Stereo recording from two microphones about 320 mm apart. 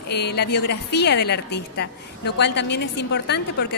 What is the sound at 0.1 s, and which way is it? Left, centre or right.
A woman's voice, left.